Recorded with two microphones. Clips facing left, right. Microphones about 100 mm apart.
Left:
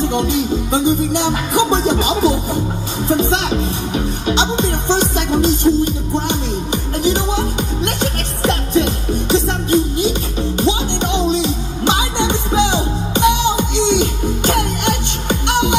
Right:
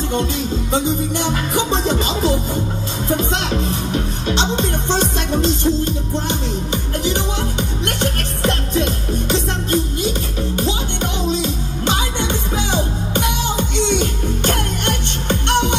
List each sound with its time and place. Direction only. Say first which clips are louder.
0.1 s music: left 4 dB; 15° left (ahead or behind)